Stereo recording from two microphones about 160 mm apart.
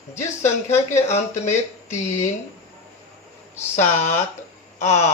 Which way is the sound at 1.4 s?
45° left (ahead or behind).